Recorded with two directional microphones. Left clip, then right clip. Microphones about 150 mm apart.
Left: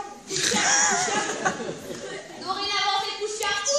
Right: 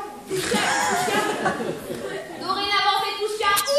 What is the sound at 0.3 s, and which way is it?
Chuckle, 20° left (ahead or behind).